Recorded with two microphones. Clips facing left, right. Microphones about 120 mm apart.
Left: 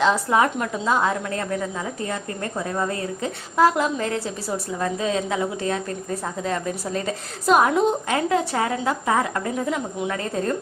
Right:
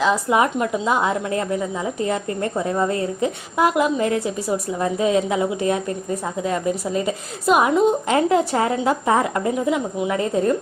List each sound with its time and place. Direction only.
0.0 s a woman's voice: 10° right (ahead or behind)
8.1 s a woman's voice: 25° right (ahead or behind)
9.6 s a woman's voice: 10° right (ahead or behind)